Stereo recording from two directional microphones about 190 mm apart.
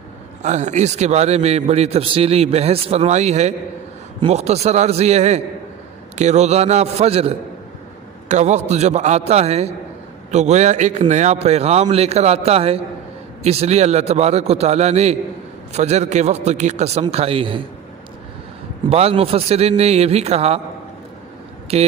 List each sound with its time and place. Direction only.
0.4 s a man's voice: 40° right (ahead or behind)
18.9 s a man's voice: 30° right (ahead or behind)
21.7 s a man's voice: 30° right (ahead or behind)